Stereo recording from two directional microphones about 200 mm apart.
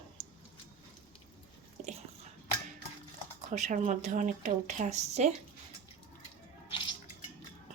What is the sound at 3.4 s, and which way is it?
Speech, 35° right (ahead or behind).